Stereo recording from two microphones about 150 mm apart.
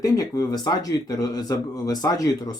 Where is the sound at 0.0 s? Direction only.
25° left (ahead or behind).